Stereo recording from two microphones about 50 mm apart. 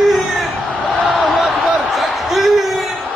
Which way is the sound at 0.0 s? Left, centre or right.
Centre.